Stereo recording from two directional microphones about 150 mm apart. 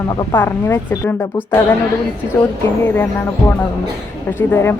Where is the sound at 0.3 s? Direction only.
15° left (ahead or behind).